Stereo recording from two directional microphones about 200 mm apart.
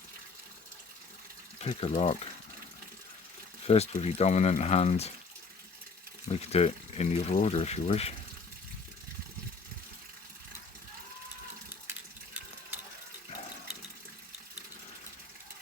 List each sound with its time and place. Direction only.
1.5 s speech: 30° left (ahead or behind)
3.7 s speech: 30° left (ahead or behind)
6.3 s speech: 30° left (ahead or behind)